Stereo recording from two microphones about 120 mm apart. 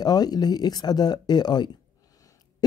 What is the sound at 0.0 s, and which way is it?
Speech, 35° left (ahead or behind).